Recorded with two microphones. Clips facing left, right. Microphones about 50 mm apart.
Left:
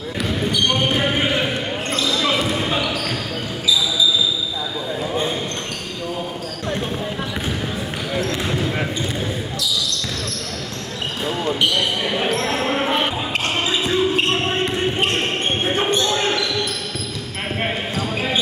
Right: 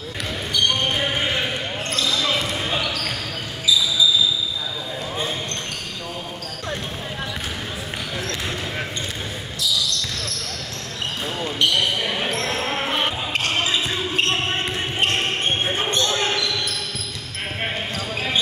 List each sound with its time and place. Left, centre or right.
0.5 s basketball bounce: centre
11.7 s basketball bounce: centre
15.6 s basketball bounce: centre
17.6 s basketball bounce: centre